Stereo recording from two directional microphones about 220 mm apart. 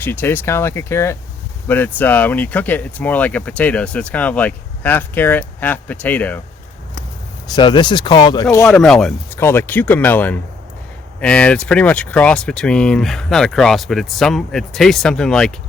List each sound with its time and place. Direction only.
0.0 s speech: 10° left (ahead or behind)
7.5 s speech: 20° left (ahead or behind)
8.7 s speech: centre (ahead or behind)